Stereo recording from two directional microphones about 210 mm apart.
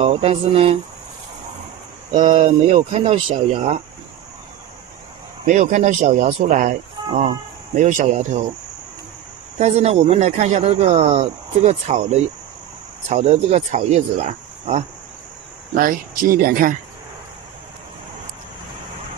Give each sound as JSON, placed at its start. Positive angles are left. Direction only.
{"t": 0.0, "sound": "speech", "side_deg": -30}
{"t": 2.1, "sound": "speech", "side_deg": -35}
{"t": 5.4, "sound": "speech", "side_deg": -35}
{"t": 9.6, "sound": "speech", "side_deg": -30}
{"t": 15.7, "sound": "speech", "side_deg": -40}